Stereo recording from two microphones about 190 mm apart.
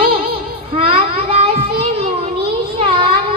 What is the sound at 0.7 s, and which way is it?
Child singing, 30° right (ahead or behind).